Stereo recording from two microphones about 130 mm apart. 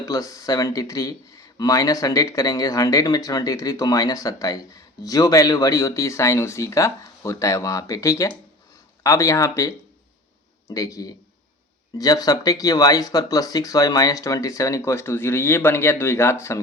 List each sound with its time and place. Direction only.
0.0 s speech: 25° left (ahead or behind)